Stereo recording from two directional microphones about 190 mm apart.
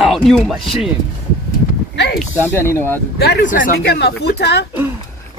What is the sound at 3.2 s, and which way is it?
Speech, 60° left (ahead or behind).